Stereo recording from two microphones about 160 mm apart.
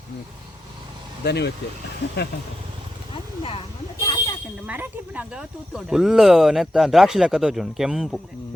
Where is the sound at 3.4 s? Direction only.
35° left (ahead or behind).